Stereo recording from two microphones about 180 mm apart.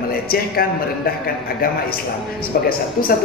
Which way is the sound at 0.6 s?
55° left (ahead or behind).